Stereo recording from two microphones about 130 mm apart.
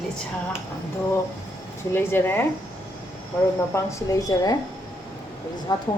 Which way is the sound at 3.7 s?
25° left (ahead or behind).